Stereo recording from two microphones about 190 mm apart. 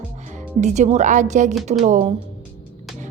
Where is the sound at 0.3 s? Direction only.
40° right (ahead or behind).